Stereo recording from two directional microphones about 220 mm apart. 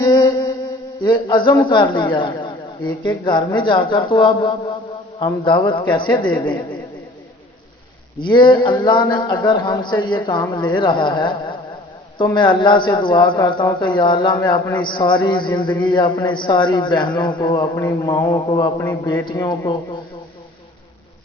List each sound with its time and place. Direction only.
0.0 s music: 15° left (ahead or behind)
1.0 s a man's voice: 20° left (ahead or behind)
8.2 s a man's voice: 20° left (ahead or behind)